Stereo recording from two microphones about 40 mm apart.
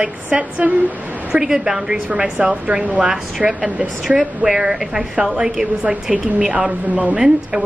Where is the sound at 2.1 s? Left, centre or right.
Right.